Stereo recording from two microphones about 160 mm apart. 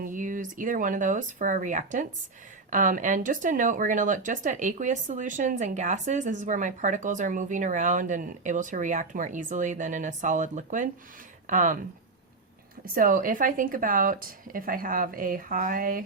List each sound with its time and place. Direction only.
0.0 s speech: 55° right (ahead or behind)
12.8 s speech: 60° right (ahead or behind)